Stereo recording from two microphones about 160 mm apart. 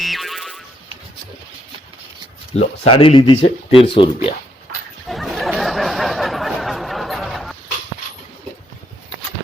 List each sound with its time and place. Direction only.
0.0 s boing: centre (ahead or behind)
2.6 s speech: 35° left (ahead or behind)
5.0 s a sound: centre (ahead or behind)